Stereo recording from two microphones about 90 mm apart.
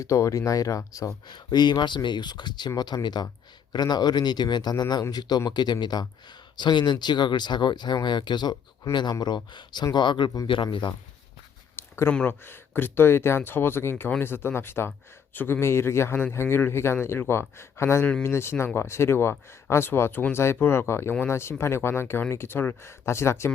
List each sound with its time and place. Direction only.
0.0 s speech: 35° left (ahead or behind)
1.3 s speech: 55° left (ahead or behind)
11.8 s a sound: 25° left (ahead or behind)
12.3 s speech: 25° left (ahead or behind)